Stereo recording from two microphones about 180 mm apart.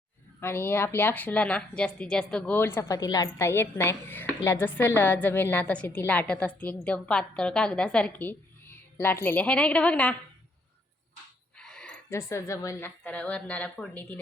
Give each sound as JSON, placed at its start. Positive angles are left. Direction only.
{"t": 0.3, "sound": "a woman's voice", "side_deg": 15}
{"t": 11.5, "sound": "a sound", "side_deg": 5}
{"t": 12.3, "sound": "a woman's voice", "side_deg": 15}